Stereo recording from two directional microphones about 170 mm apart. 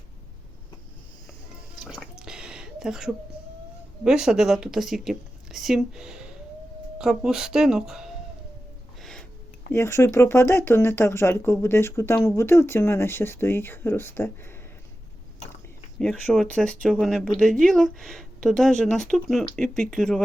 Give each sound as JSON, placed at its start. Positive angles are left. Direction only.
{"t": 1.8, "sound": "drip", "side_deg": -5}
{"t": 4.0, "sound": "speech", "side_deg": -5}
{"t": 9.0, "sound": "a sound", "side_deg": 0}
{"t": 9.7, "sound": "speech", "side_deg": 15}
{"t": 16.0, "sound": "speech", "side_deg": 0}